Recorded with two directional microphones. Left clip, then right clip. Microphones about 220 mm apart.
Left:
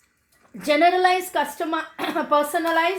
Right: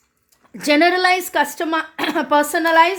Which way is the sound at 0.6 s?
40° right (ahead or behind).